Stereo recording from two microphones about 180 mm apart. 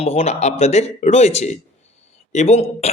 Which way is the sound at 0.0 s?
35° left (ahead or behind).